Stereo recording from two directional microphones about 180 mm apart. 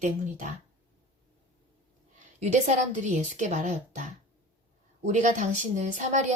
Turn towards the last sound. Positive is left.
turn(degrees=-40)  # may be behind; listen again after turning